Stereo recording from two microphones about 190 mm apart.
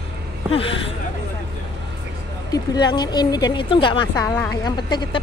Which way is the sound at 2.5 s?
20° left (ahead or behind).